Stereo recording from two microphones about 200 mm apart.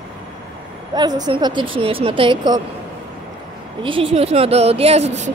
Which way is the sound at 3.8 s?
25° right (ahead or behind).